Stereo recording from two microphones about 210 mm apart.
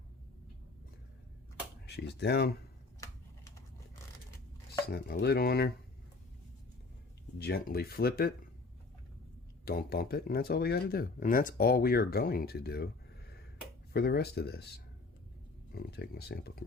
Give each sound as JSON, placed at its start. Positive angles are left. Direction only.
{"t": 2.1, "sound": "speech", "side_deg": 50}
{"t": 4.9, "sound": "speech", "side_deg": 45}
{"t": 7.3, "sound": "speech", "side_deg": 50}
{"t": 9.6, "sound": "speech", "side_deg": 45}
{"t": 13.9, "sound": "speech", "side_deg": 50}
{"t": 15.7, "sound": "speech", "side_deg": 50}